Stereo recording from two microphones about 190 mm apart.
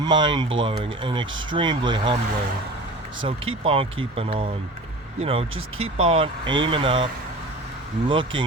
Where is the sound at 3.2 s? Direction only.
30° right (ahead or behind).